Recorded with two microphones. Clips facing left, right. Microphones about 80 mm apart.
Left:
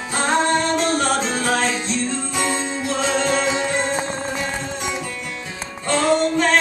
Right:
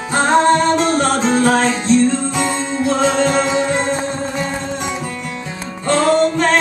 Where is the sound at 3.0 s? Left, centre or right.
Right.